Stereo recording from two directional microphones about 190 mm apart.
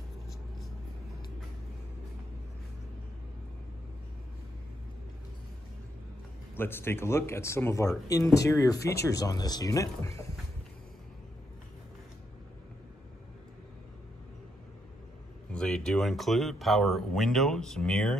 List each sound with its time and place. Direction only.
6.5 s speech: 10° left (ahead or behind)
15.5 s speech: 5° left (ahead or behind)